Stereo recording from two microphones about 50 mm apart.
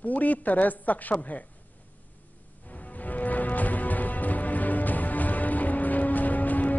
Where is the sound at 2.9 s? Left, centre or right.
Left.